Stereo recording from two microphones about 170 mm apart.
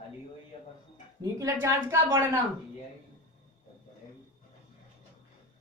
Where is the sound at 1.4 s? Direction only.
20° right (ahead or behind).